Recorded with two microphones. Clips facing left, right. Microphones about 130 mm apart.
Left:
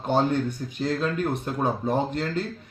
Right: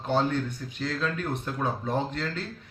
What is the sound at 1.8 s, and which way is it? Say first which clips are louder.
Mantra: left 4 dB; 15° left (ahead or behind).